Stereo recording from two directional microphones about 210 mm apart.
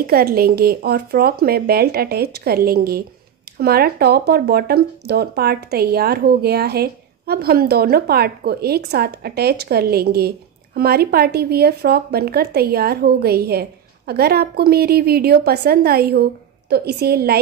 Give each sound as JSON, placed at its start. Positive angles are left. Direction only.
{"t": 0.0, "sound": "speech", "side_deg": -45}